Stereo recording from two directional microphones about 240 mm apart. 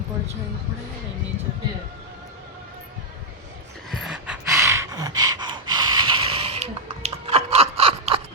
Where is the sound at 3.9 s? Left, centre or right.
Centre.